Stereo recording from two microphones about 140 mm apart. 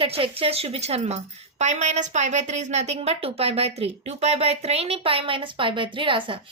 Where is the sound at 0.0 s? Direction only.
40° right (ahead or behind).